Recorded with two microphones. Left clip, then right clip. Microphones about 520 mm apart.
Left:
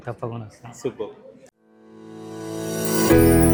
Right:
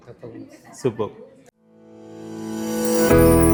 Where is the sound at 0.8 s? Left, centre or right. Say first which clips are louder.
Right 5 dB; right.